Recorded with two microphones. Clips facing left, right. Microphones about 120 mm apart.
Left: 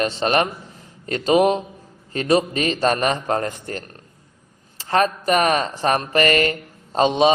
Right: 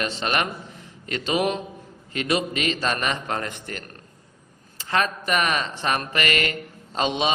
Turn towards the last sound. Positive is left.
turn(degrees=35)  # may be behind; listen again after turning